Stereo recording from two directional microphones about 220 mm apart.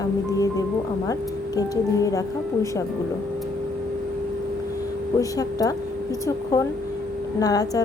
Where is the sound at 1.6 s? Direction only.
15° left (ahead or behind).